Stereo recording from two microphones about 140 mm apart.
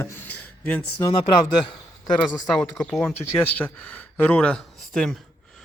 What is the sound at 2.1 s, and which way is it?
Speech, 30° left (ahead or behind).